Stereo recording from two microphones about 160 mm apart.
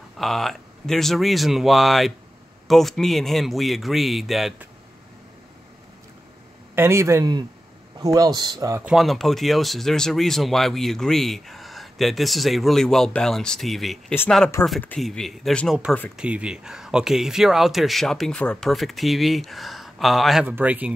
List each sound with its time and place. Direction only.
0.2 s speech: centre (ahead or behind)
6.7 s a man's voice: 15° right (ahead or behind)
8.8 s speech: centre (ahead or behind)
20.4 s a man's voice: 10° right (ahead or behind)